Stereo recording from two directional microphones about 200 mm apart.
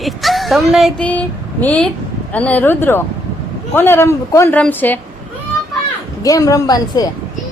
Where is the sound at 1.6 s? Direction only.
5° left (ahead or behind).